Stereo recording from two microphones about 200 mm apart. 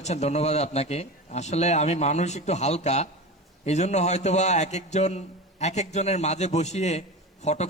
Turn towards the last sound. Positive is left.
turn(degrees=35)  # may be behind; listen again after turning